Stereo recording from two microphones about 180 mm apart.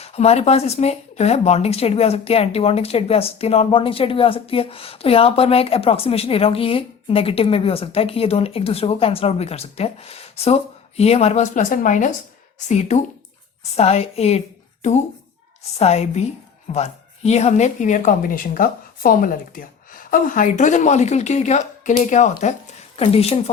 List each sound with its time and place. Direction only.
0.0 s a woman's voice: 35° left (ahead or behind)